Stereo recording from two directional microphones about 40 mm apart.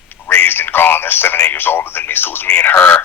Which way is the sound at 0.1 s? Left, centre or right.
Left.